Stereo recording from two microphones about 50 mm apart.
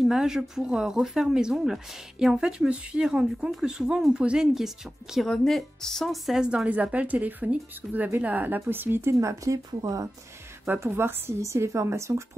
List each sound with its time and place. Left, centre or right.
0.0 s speech: centre
2.7 s speech: right
4.6 s speech: centre
5.2 s speech: centre
6.4 s speech: right
9.2 s speech: right
10.8 s a woman's voice: right
11.4 s a woman's voice: right